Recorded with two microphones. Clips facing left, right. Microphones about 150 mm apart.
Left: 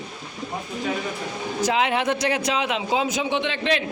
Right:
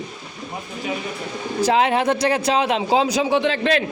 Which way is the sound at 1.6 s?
35° right (ahead or behind).